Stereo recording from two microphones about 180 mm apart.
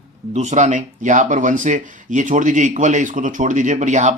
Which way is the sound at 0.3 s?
40° right (ahead or behind).